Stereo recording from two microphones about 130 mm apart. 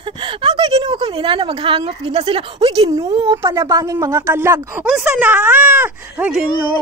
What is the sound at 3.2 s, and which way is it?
Speech, 25° right (ahead or behind).